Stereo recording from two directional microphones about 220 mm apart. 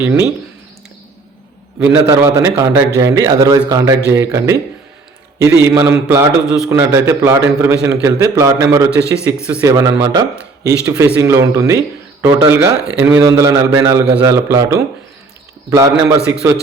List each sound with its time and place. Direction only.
0.0 s a man's voice: 10° right (ahead or behind)
1.8 s a man's voice: 15° right (ahead or behind)